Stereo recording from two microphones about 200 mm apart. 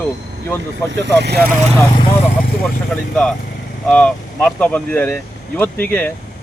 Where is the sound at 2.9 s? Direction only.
5° left (ahead or behind).